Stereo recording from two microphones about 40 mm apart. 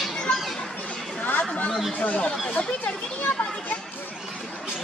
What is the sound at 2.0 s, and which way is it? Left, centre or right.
Speech, left.